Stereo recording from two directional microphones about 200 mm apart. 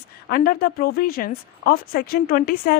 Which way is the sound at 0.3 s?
45° left (ahead or behind).